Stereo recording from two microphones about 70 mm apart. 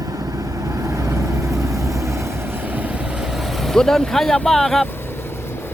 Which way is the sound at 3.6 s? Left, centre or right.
Centre.